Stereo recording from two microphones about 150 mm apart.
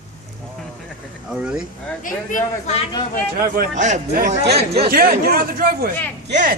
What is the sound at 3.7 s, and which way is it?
Speech, 55° right (ahead or behind).